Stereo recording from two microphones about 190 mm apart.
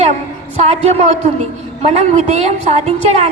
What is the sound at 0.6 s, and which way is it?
A woman's voice, 35° right (ahead or behind).